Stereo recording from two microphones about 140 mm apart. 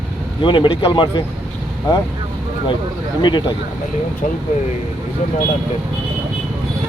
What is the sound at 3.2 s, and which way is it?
Speech, 35° left (ahead or behind).